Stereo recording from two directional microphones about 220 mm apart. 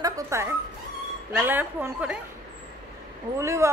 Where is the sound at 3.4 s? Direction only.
15° right (ahead or behind).